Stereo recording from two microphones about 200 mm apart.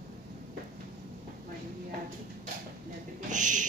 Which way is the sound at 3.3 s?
40° right (ahead or behind).